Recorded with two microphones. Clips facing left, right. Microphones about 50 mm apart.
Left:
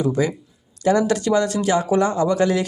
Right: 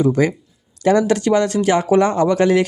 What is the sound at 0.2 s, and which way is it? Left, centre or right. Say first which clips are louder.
Speech: right 4 dB; right.